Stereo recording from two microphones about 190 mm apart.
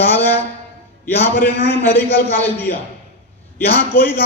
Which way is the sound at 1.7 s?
10° left (ahead or behind).